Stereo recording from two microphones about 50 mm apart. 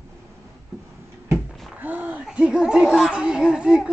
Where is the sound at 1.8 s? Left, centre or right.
Right.